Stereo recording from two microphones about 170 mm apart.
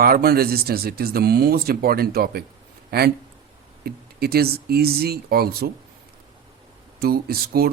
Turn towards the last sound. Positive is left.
turn(degrees=-65)  # may be behind; listen again after turning